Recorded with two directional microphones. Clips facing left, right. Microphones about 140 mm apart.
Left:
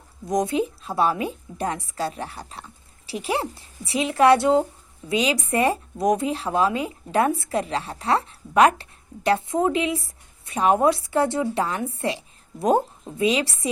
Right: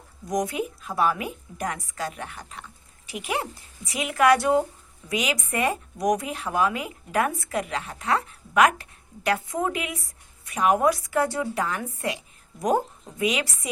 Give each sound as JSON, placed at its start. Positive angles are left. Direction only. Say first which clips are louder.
{"t": 0.3, "sound": "speech", "louder": "left 4 dB", "side_deg": 25}